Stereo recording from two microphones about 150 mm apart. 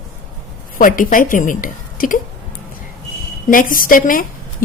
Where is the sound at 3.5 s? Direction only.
65° left (ahead or behind).